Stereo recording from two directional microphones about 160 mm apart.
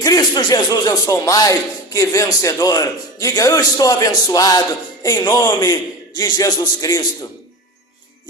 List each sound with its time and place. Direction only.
0.0 s speech: 25° left (ahead or behind)